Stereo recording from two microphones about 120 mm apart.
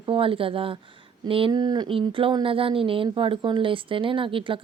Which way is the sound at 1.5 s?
35° right (ahead or behind).